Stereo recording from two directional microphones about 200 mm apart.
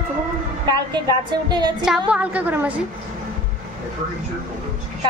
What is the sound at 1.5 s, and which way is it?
Speech, 20° right (ahead or behind).